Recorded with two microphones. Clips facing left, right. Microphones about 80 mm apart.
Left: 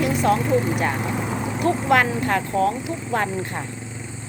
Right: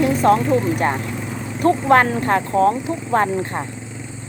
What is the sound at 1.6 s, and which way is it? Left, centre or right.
Speech, right.